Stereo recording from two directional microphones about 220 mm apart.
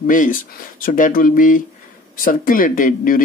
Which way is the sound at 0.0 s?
40° left (ahead or behind).